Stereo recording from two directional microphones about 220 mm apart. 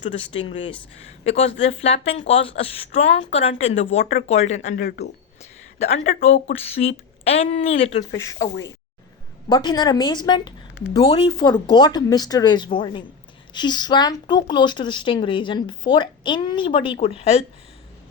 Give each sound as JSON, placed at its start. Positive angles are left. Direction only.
{"t": 0.2, "sound": "speech", "side_deg": 25}
{"t": 4.8, "sound": "speech", "side_deg": 45}
{"t": 5.4, "sound": "a sound", "side_deg": 30}
{"t": 6.7, "sound": "speech", "side_deg": 30}
{"t": 8.1, "sound": "speech", "side_deg": 15}